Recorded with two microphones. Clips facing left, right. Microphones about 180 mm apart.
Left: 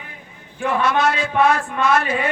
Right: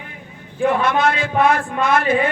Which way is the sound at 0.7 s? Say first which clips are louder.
Left 1 dB; 55° right (ahead or behind).